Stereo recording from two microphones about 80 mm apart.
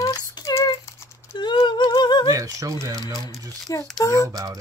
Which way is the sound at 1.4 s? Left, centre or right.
Left.